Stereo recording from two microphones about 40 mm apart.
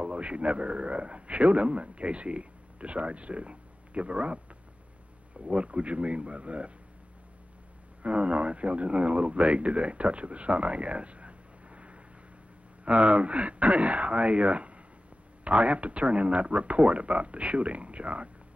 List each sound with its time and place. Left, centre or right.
0.0 s a man's voice: right
8.0 s a man's voice: right